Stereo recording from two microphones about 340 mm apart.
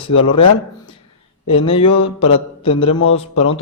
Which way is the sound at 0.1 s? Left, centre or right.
Centre.